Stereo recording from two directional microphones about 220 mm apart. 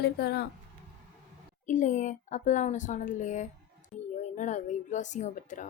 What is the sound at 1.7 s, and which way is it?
A woman's voice, 35° left (ahead or behind).